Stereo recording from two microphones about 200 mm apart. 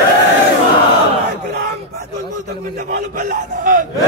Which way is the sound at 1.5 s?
55° right (ahead or behind).